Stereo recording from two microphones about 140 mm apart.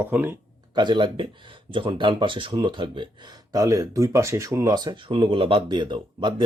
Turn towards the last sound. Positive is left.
turn(degrees=-35)  # may be behind; listen again after turning